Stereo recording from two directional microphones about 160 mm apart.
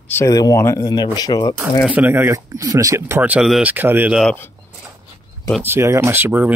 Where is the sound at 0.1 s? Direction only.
20° left (ahead or behind).